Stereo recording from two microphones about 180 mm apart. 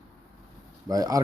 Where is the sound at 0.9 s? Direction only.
20° right (ahead or behind).